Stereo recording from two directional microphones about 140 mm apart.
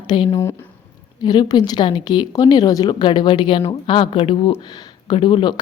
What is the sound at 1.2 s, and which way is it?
A woman's voice, 30° left (ahead or behind).